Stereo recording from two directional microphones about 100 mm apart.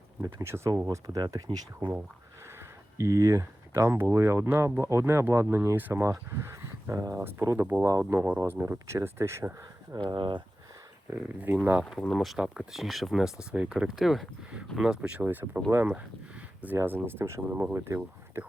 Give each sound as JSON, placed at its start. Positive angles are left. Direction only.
{"t": 0.2, "sound": "speech", "side_deg": -30}
{"t": 0.9, "sound": "speech", "side_deg": -35}
{"t": 1.5, "sound": "speech", "side_deg": -55}
{"t": 2.5, "sound": "speech", "side_deg": -30}
{"t": 10.0, "sound": "speech", "side_deg": -50}
{"t": 11.3, "sound": "speech", "side_deg": -15}
{"t": 11.9, "sound": "speech", "side_deg": 0}